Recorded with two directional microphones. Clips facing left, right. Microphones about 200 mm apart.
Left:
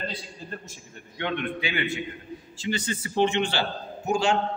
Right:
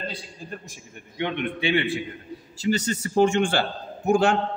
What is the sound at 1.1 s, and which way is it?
Speech, 20° right (ahead or behind).